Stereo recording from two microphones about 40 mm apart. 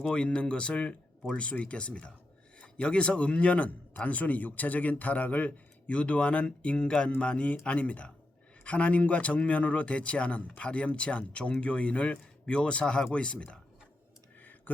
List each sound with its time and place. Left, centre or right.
0.1 s a man's voice: left